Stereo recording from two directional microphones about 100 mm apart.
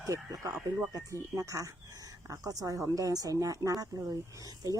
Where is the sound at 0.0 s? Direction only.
30° right (ahead or behind).